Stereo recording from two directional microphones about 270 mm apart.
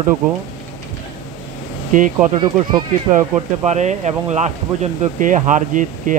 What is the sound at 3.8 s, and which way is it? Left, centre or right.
Speech, right.